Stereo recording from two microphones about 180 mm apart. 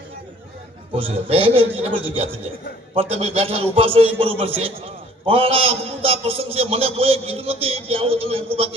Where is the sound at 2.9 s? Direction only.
30° right (ahead or behind).